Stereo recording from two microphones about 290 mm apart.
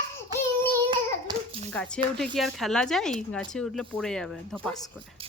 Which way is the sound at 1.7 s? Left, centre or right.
Centre.